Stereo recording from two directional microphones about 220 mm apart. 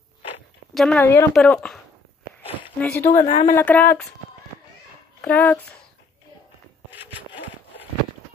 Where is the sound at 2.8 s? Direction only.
10° left (ahead or behind).